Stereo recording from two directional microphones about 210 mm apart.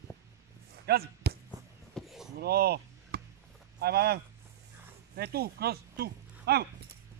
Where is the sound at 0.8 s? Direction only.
50° right (ahead or behind).